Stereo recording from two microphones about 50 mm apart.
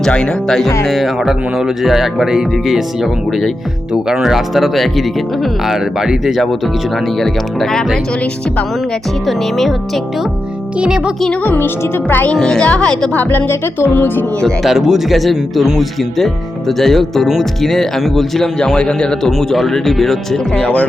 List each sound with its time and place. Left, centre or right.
0.1 s speech: centre
0.9 s speech: centre
5.7 s speech: centre
7.2 s speech: centre
9.2 s speech: centre
10.8 s speech: centre
11.4 s speech: left
12.3 s speech: centre
13.1 s speech: left
14.6 s speech: centre
16.0 s speech: centre
20.6 s speech: left